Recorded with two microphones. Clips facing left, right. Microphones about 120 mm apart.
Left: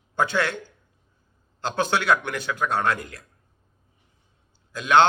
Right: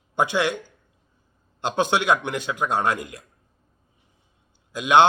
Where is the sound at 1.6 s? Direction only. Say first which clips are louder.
Right 2 dB; 20° right (ahead or behind).